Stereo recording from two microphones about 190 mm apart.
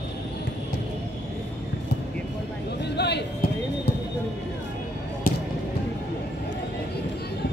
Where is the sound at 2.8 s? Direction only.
60° left (ahead or behind).